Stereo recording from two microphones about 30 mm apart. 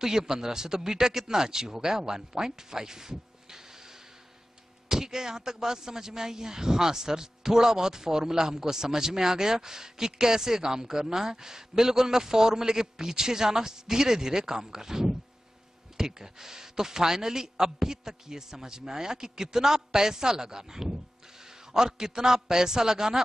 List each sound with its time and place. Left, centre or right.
0.0 s speech: centre